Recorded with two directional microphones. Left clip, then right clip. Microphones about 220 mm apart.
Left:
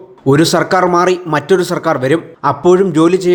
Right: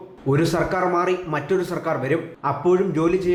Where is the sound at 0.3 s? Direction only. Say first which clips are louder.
Left 10 dB; 40° left (ahead or behind).